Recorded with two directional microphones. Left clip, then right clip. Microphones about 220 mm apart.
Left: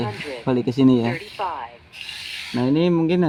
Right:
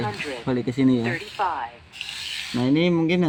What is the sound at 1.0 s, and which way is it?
Speech, centre (ahead or behind).